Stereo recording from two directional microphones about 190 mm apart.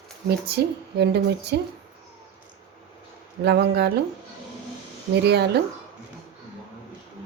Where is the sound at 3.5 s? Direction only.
60° right (ahead or behind).